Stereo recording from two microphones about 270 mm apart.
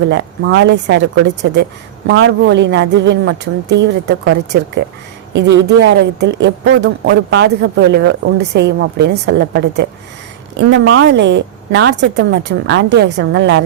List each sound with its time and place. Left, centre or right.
0.1 s speech: right
5.3 s speech: right